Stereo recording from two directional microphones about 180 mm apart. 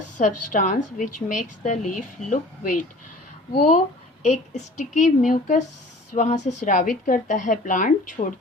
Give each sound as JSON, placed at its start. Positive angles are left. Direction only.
{"t": 0.2, "sound": "speech", "side_deg": 40}
{"t": 4.2, "sound": "a woman's voice", "side_deg": 40}